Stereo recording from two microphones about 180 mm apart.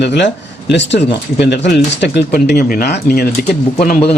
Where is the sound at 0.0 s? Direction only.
70° left (ahead or behind).